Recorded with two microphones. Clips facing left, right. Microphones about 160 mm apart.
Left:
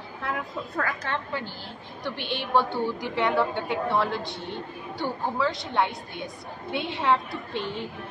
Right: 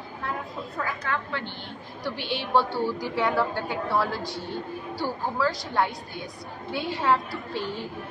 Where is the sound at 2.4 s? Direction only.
15° left (ahead or behind).